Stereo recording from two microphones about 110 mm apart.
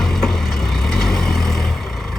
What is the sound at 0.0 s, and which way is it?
Vehicle, 5° left (ahead or behind).